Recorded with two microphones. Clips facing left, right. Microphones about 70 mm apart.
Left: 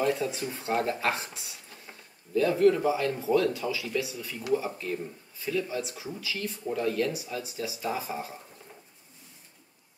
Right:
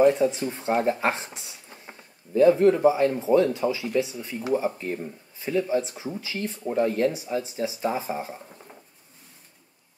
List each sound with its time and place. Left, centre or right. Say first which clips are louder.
0.0 s speech: right 8 dB; right